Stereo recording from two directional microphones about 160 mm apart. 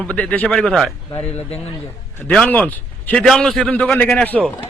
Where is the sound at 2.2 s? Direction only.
5° left (ahead or behind).